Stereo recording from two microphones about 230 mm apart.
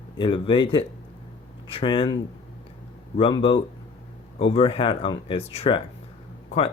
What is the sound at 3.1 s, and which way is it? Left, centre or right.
Speech, left.